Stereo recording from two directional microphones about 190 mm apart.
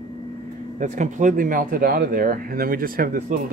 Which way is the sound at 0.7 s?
40° right (ahead or behind).